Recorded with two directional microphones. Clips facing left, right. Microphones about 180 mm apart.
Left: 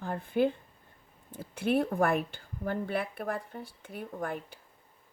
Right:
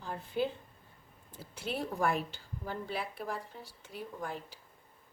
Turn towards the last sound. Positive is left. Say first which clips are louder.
# left 5 dB
turn(degrees=55)  # may be behind; listen again after turning